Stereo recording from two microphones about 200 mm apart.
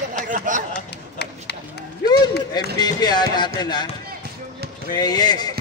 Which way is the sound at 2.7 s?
20° left (ahead or behind).